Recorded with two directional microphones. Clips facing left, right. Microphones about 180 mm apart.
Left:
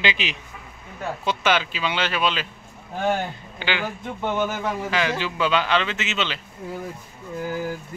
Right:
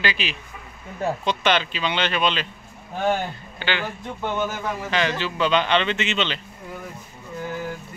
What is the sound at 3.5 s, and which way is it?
Speech, 10° left (ahead or behind).